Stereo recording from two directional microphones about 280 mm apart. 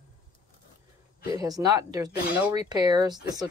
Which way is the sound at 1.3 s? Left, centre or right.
Centre.